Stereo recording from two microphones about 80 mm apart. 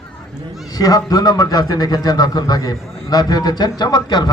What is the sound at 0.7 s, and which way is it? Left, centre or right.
A man's voice, left.